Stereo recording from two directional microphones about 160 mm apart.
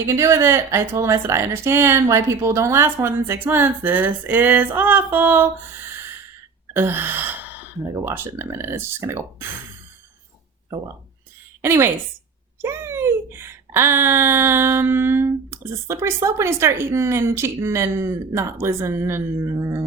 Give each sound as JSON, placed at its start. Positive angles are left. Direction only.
{"t": 0.0, "sound": "speech", "side_deg": -15}
{"t": 6.7, "sound": "speech", "side_deg": -15}
{"t": 11.6, "sound": "a woman's voice", "side_deg": -15}